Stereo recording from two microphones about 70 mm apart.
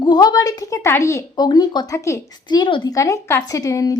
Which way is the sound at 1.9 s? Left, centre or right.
Left.